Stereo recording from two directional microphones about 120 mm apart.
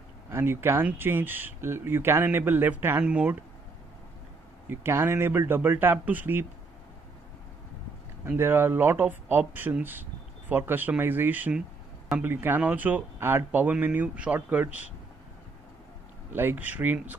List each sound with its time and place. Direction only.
0.3 s speech: 20° right (ahead or behind)
4.6 s speech: 20° right (ahead or behind)
8.3 s speech: 20° right (ahead or behind)
16.3 s speech: 15° right (ahead or behind)